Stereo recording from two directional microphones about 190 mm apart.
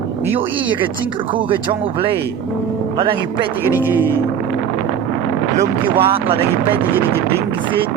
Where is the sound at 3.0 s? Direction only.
25° right (ahead or behind).